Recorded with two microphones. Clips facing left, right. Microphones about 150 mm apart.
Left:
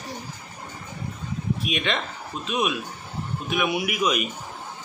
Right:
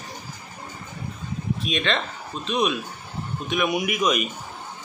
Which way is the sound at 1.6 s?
10° left (ahead or behind).